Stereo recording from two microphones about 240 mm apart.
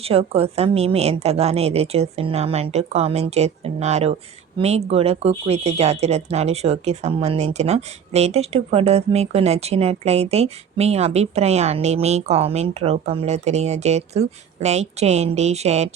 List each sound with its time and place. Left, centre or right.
0.0 s speech: right